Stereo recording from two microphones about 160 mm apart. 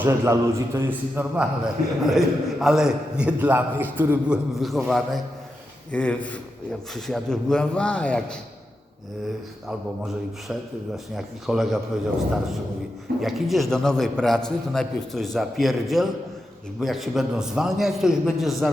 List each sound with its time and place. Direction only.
0.0 s a man's voice: 15° right (ahead or behind)
4.6 s a man's voice: centre (ahead or behind)
10.5 s a man's voice: centre (ahead or behind)
13.2 s a man's voice: centre (ahead or behind)